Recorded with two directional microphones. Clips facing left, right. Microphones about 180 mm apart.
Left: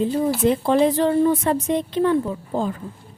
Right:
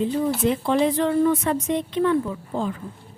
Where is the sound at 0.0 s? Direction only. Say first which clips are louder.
Left 2 dB; 40° left (ahead or behind).